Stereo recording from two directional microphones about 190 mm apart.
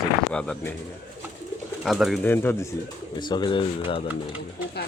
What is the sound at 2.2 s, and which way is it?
Speech, 10° left (ahead or behind).